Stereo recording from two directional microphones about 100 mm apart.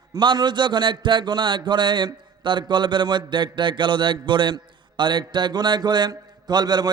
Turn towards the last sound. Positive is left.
turn(degrees=-45)  # may be behind; listen again after turning